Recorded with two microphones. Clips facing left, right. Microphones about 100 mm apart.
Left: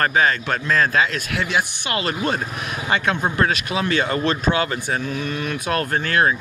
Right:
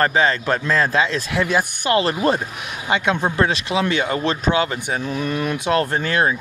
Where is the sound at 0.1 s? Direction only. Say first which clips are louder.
Right 1 dB; 30° right (ahead or behind).